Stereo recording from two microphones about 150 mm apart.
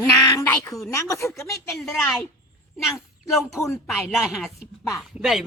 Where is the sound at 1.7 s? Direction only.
Centre (ahead or behind).